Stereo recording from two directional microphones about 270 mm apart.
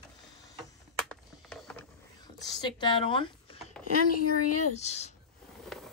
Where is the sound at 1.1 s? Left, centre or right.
Centre.